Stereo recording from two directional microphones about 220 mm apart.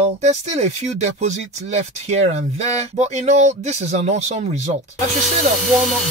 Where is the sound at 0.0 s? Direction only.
30° right (ahead or behind).